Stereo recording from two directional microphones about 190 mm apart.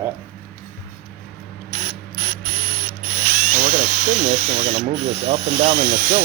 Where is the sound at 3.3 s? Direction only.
45° right (ahead or behind).